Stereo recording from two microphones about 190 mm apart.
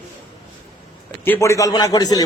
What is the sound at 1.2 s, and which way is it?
A man's voice, 10° left (ahead or behind).